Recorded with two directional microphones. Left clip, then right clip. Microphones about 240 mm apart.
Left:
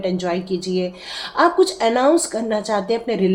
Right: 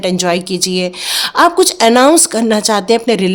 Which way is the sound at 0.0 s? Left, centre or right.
Right.